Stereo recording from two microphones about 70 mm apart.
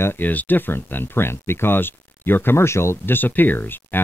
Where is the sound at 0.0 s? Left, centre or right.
Left.